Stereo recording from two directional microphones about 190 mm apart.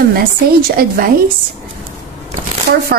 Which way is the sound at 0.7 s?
50° right (ahead or behind).